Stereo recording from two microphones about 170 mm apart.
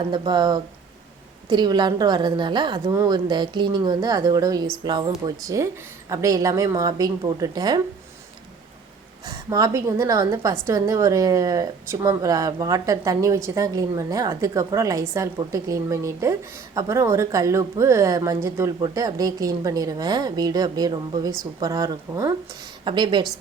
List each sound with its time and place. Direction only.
0.0 s a woman's voice: 25° right (ahead or behind)
9.2 s a woman's voice: 20° right (ahead or behind)
22.8 s a woman's voice: 30° right (ahead or behind)